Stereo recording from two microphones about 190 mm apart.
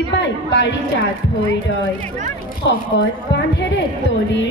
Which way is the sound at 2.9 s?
70° left (ahead or behind).